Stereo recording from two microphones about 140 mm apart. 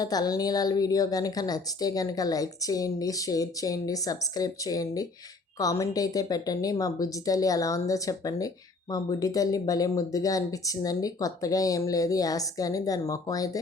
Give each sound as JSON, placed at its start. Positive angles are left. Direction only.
{"t": 0.0, "sound": "a woman's voice", "side_deg": 25}